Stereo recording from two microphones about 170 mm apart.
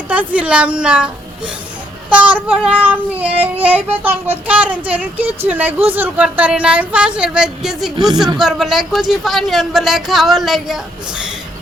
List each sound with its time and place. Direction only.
0.1 s child singing: 10° right (ahead or behind)
7.9 s speech: 25° right (ahead or behind)
8.4 s speech: 5° right (ahead or behind)